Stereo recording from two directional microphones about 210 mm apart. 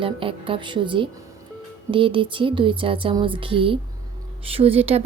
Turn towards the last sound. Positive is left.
turn(degrees=-30)  # may be behind; listen again after turning